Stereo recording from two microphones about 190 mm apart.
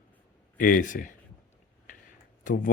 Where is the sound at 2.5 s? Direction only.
45° left (ahead or behind).